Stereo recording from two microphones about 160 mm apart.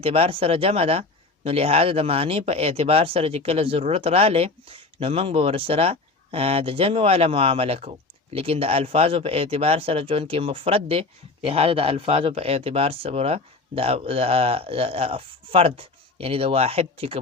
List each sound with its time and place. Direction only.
0.0 s speech: 35° right (ahead or behind)